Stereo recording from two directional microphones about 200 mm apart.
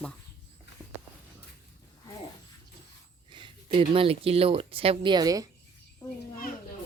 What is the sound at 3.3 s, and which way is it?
Speech, 25° right (ahead or behind).